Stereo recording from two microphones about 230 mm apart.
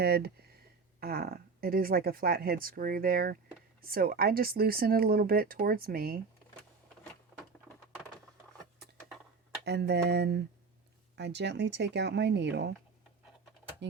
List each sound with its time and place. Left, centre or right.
0.0 s speech: right
9.6 s speech: right